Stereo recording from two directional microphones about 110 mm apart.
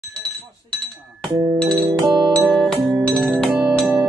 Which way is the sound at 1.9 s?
45° right (ahead or behind).